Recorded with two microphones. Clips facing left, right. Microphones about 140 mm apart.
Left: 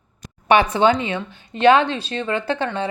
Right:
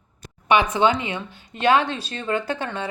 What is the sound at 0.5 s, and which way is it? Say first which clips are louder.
Speech: left 3 dB; 35° left (ahead or behind).